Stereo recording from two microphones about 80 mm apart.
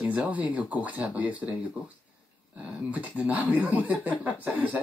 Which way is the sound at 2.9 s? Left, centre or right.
Centre.